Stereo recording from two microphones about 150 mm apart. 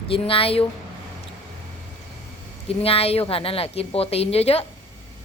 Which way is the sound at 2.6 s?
40° left (ahead or behind).